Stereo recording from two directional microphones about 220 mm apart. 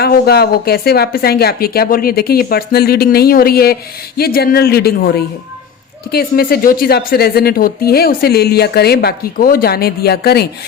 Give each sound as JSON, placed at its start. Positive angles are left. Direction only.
{"t": 0.0, "sound": "a woman's voice", "side_deg": 45}